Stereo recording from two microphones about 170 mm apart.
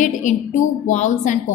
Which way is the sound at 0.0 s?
45° left (ahead or behind).